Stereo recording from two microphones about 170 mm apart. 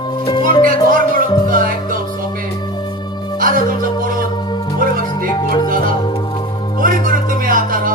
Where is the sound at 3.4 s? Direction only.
55° right (ahead or behind).